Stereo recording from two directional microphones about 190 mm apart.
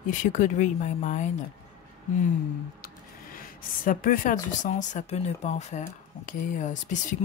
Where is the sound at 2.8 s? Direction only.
50° left (ahead or behind).